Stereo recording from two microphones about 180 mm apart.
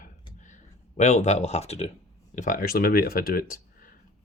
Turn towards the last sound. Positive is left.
turn(degrees=55)  # may be behind; listen again after turning